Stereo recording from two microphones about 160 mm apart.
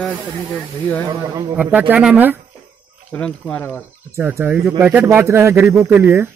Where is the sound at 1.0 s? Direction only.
25° right (ahead or behind).